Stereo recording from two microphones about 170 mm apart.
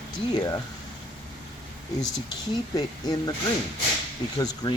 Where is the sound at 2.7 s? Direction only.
20° left (ahead or behind).